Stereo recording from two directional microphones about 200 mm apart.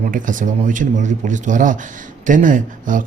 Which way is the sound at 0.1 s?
40° right (ahead or behind).